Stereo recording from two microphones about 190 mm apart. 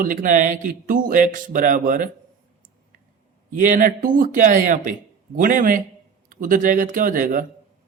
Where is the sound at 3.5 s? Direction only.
45° right (ahead or behind).